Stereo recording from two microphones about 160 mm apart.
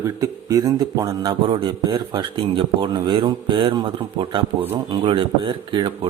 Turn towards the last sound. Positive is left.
turn(degrees=-30)  # may be behind; listen again after turning